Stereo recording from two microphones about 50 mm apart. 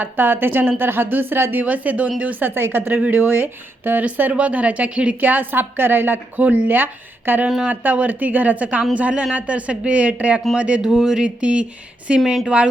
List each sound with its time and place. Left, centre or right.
0.0 s a woman's voice: right
4.0 s a woman's voice: right
6.3 s a woman's voice: right
10.8 s speech: centre
11.3 s speech: right